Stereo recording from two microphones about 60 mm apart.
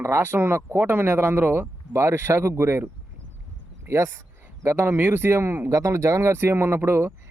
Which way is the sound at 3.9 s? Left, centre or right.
Right.